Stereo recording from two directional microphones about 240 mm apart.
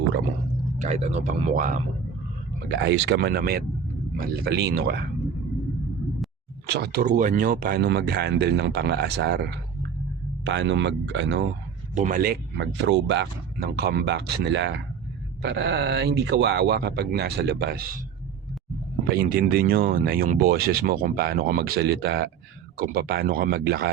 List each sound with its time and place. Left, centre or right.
0.8 s speech: right
2.6 s speech: right
6.7 s speech: right
11.9 s speech: right
19.0 s speech: right